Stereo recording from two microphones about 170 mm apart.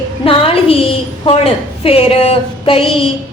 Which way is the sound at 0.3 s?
35° left (ahead or behind).